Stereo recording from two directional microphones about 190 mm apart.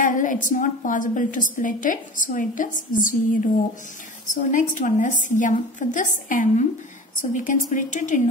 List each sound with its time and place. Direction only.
0.0 s a woman's voice: 45° left (ahead or behind)
4.3 s a woman's voice: 40° left (ahead or behind)